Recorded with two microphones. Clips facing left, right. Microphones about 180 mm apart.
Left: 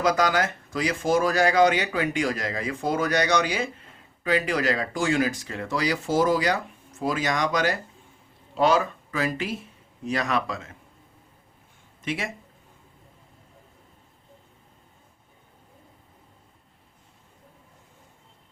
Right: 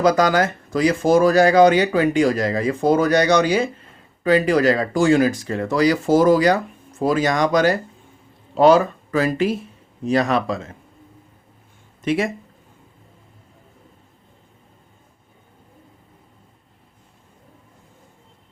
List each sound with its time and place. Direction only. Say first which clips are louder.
0.0 s speech: right 6 dB; 35° right (ahead or behind)
12.0 s speech: right 10 dB; 40° right (ahead or behind)